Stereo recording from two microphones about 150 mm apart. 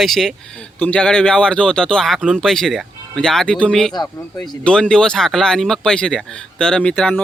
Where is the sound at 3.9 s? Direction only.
30° left (ahead or behind).